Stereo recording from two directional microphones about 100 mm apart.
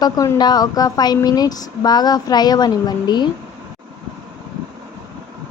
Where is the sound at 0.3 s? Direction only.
40° left (ahead or behind).